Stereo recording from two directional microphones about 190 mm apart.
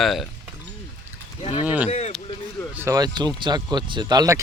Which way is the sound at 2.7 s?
15° right (ahead or behind).